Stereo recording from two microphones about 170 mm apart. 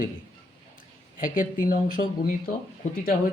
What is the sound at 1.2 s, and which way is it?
Speech, 55° left (ahead or behind).